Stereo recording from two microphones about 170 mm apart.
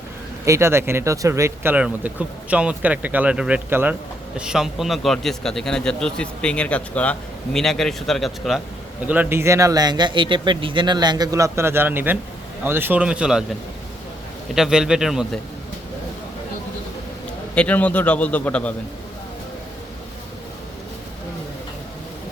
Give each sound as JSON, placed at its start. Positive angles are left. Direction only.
{"t": 0.4, "sound": "a man's voice", "side_deg": -15}
{"t": 9.0, "sound": "speech", "side_deg": -10}
{"t": 14.5, "sound": "a man's voice", "side_deg": -5}
{"t": 17.5, "sound": "a man's voice", "side_deg": 10}